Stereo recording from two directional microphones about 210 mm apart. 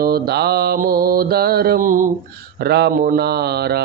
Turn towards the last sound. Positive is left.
turn(degrees=-50)  # may be behind; listen again after turning